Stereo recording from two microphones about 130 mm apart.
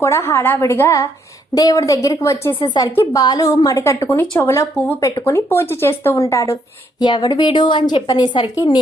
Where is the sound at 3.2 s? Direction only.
30° left (ahead or behind).